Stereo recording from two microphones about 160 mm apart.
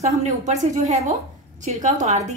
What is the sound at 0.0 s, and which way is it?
A woman's voice, 45° right (ahead or behind).